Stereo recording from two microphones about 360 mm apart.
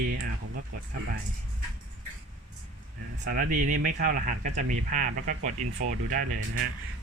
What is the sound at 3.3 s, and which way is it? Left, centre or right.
Speech, right.